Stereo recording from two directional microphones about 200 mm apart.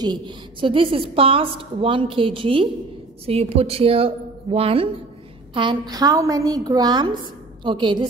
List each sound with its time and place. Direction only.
0.0 s a woman's voice: 20° right (ahead or behind)